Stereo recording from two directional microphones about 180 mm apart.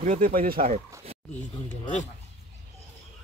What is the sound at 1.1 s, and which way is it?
Zipper, 35° right (ahead or behind).